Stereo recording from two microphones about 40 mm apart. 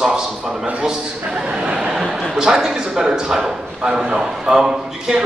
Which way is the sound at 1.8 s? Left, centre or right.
Centre.